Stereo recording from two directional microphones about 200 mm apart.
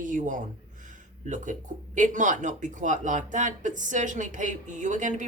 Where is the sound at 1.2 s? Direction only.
40° right (ahead or behind).